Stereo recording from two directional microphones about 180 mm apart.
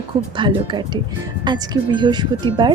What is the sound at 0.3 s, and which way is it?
A woman's voice, 25° right (ahead or behind).